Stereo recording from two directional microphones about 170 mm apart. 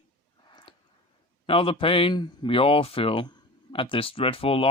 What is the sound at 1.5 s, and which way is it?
Speech, 30° left (ahead or behind).